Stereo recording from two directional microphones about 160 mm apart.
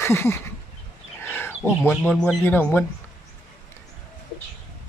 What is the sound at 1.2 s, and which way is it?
Speech, 15° left (ahead or behind).